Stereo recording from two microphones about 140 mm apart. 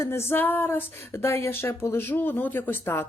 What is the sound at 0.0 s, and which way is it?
Speech, 20° left (ahead or behind).